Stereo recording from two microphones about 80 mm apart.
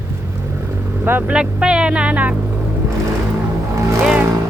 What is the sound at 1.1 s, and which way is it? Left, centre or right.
Speech, right.